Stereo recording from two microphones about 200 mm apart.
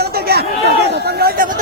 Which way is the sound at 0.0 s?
55° right (ahead or behind).